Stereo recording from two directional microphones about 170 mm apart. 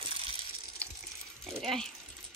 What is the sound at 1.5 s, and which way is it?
Speech, centre (ahead or behind).